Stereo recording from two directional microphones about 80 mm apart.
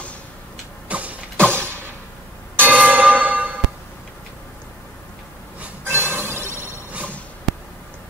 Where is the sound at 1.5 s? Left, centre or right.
Right.